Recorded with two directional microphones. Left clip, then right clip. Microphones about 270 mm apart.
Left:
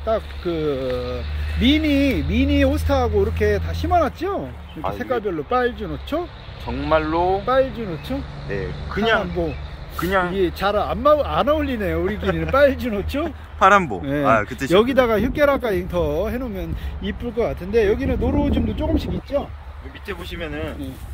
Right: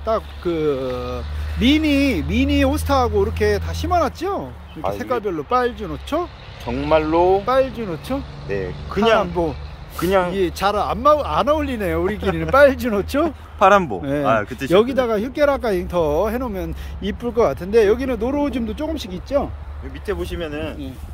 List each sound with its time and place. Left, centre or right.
0.1 s speech: centre
6.6 s speech: right
7.4 s speech: centre
8.5 s speech: right
10.3 s speech: centre
20.1 s speech: right